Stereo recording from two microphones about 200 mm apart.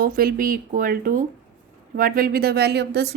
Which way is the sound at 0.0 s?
45° right (ahead or behind).